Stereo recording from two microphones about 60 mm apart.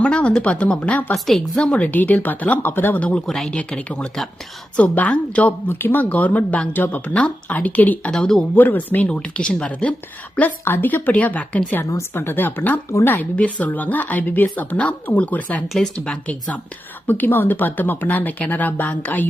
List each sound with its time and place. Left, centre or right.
0.0 s speech: centre
3.0 s speech: left
3.2 s speech: centre
3.5 s speech: left
5.6 s speech: left
6.1 s speech: left
8.1 s speech: centre
8.5 s speech: left
9.0 s speech: centre
10.7 s speech: left
12.1 s speech: left
17.1 s speech: left